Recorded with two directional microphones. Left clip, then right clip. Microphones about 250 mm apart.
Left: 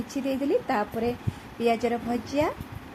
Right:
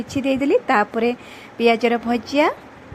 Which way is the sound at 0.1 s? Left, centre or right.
Right.